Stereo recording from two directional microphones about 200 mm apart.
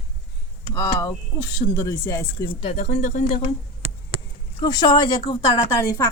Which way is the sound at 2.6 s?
35° left (ahead or behind).